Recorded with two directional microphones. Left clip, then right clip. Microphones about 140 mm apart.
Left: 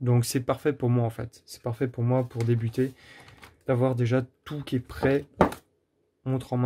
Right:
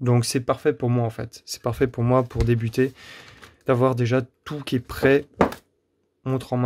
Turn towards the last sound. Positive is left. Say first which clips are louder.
# right 5 dB
turn(degrees=-25)  # may be behind; listen again after turning